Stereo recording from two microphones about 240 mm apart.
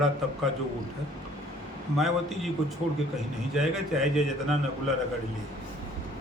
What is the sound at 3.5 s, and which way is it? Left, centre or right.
Speech, centre.